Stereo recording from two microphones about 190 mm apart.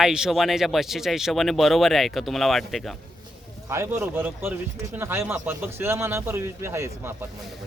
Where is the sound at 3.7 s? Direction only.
15° right (ahead or behind).